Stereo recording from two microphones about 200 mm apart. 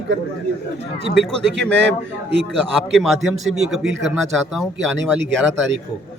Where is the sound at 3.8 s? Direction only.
65° right (ahead or behind).